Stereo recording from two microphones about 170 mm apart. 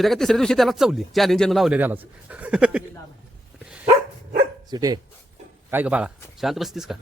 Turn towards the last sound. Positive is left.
turn(degrees=0)  # may be behind; listen again after turning